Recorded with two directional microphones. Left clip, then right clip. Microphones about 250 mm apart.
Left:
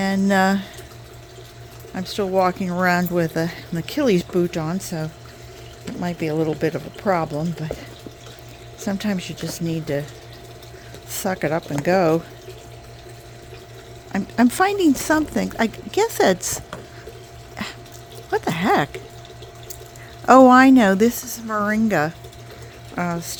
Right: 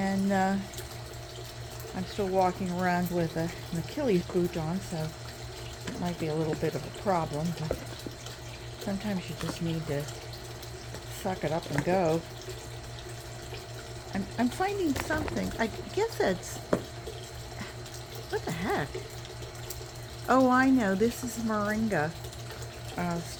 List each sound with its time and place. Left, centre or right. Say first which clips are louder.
0.0 s speech: left 10 dB; left
2.0 s speech: left 8 dB; left
6.0 s speech: left 9 dB; left
9.0 s speech: left 8 dB; left
11.1 s speech: left 9 dB; left
14.1 s speech: left 12 dB; left
17.6 s water: left 13 dB; left
18.3 s speech: left 12 dB; left
20.2 s speech: left 13 dB; left